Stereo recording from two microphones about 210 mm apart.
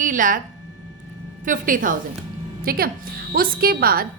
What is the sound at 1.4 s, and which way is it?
A woman's voice, 40° right (ahead or behind).